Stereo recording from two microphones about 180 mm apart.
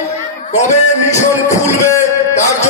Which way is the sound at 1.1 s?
15° left (ahead or behind).